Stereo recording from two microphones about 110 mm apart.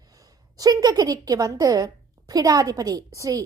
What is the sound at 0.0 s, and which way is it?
A woman's voice, 35° right (ahead or behind).